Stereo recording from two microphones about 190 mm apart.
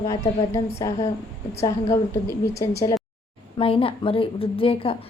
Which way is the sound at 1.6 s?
15° left (ahead or behind).